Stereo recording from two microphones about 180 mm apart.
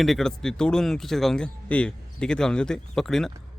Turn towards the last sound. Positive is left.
turn(degrees=0)  # may be behind; listen again after turning